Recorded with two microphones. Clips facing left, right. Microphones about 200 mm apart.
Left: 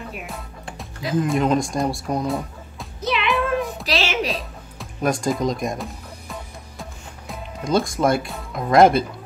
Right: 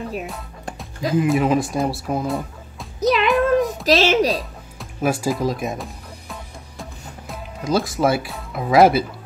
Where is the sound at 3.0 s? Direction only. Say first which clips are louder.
Right 7 dB; 40° right (ahead or behind).